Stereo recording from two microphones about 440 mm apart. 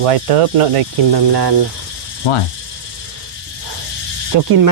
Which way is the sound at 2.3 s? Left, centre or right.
Left.